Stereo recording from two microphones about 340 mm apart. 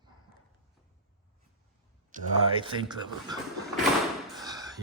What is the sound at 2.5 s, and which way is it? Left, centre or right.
Speech, centre.